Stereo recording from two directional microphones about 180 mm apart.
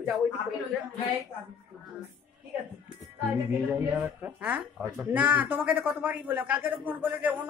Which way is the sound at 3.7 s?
10° right (ahead or behind).